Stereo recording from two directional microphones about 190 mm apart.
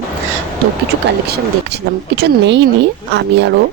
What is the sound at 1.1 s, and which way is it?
Speech, 60° right (ahead or behind).